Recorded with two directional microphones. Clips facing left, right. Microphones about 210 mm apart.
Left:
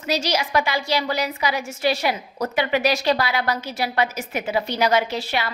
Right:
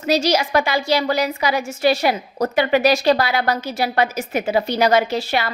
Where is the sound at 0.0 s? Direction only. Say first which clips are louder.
Right 6 dB; 45° right (ahead or behind).